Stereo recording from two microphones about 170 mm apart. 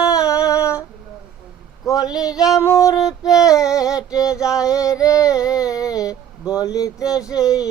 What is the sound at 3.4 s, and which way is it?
Female singing, 20° left (ahead or behind).